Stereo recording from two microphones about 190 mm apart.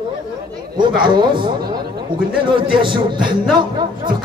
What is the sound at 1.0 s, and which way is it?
Speech, 25° right (ahead or behind).